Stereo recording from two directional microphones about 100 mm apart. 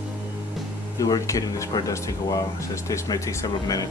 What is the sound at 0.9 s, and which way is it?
Speech, 35° left (ahead or behind).